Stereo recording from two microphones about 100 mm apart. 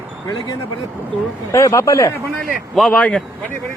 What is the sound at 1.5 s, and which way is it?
Speech, 30° left (ahead or behind).